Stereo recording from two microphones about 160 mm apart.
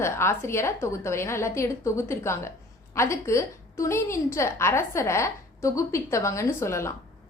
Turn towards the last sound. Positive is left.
turn(degrees=15)  # may be behind; listen again after turning